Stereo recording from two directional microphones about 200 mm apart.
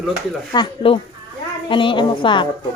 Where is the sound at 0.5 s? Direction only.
25° left (ahead or behind).